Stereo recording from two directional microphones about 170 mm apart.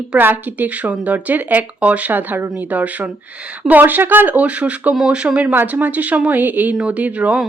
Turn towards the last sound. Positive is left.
turn(degrees=-5)  # may be behind; listen again after turning